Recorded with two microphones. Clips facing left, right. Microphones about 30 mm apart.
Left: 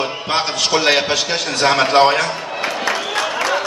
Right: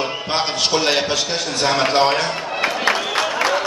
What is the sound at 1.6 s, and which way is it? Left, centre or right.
Speech, left.